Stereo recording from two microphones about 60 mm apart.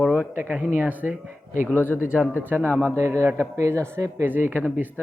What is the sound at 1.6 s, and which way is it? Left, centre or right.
Speech, left.